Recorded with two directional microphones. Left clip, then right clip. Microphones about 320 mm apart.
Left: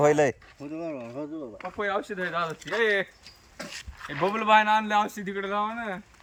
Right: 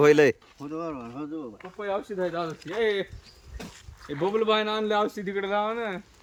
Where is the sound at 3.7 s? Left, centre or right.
Left.